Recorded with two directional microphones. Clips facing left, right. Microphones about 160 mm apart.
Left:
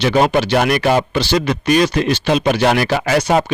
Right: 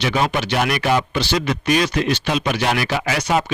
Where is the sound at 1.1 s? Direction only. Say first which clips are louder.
Left 4 dB; 35° left (ahead or behind).